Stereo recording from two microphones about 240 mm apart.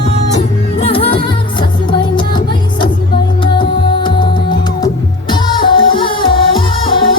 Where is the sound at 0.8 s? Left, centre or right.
Left.